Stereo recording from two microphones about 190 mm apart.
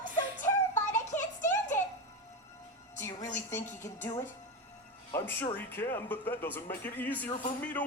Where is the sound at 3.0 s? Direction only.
15° left (ahead or behind).